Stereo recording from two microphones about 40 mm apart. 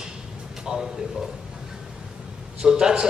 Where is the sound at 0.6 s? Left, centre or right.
Centre.